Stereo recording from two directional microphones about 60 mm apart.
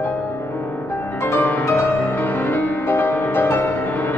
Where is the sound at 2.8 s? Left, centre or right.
Left.